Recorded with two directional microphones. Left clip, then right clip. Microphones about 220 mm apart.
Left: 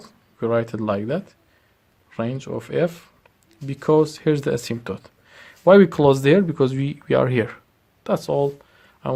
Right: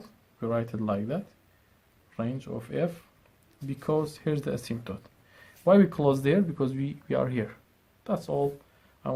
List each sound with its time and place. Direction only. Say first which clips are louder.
0.0 s speech: left 10 dB; 40° left (ahead or behind)